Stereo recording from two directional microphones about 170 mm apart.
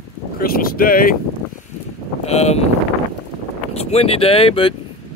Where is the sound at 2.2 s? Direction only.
40° left (ahead or behind).